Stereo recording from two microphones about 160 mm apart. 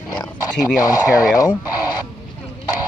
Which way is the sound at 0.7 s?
20° left (ahead or behind).